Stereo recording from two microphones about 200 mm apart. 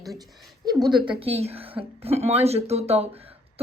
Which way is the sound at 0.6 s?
20° right (ahead or behind).